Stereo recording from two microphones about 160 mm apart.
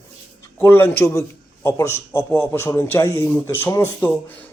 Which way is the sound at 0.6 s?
15° left (ahead or behind).